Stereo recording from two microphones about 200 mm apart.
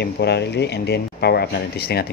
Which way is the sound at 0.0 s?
55° left (ahead or behind).